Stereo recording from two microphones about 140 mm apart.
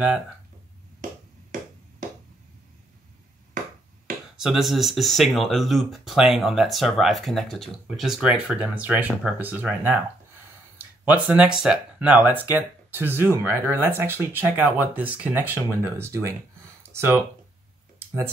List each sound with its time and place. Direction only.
4.4 s speech: centre (ahead or behind); by 17.2 s 15° right (ahead or behind)